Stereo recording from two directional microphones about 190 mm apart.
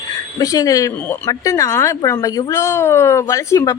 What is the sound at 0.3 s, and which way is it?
A woman's voice, 20° left (ahead or behind).